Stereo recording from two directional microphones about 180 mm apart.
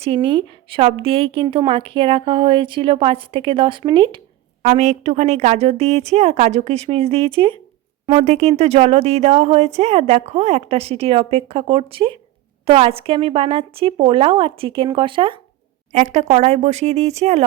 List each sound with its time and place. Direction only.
0.0 s a woman's voice: 30° right (ahead or behind)
4.6 s speech: 40° right (ahead or behind)
15.9 s speech: 40° right (ahead or behind)